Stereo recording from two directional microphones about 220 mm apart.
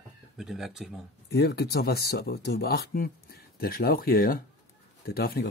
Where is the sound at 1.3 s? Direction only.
45° left (ahead or behind).